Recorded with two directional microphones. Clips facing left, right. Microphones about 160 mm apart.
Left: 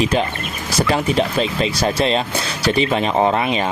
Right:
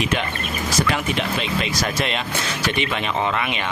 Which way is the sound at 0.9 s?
35° left (ahead or behind).